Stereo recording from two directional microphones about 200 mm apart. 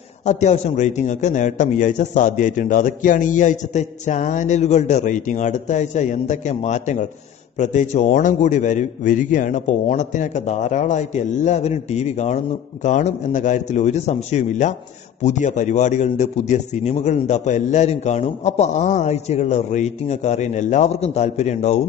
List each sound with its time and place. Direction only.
0.2 s a man's voice: 35° left (ahead or behind)